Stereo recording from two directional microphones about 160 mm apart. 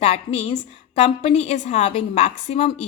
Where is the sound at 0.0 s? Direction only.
40° left (ahead or behind).